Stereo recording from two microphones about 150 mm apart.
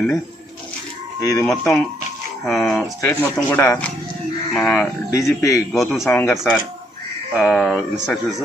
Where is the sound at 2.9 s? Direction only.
15° left (ahead or behind).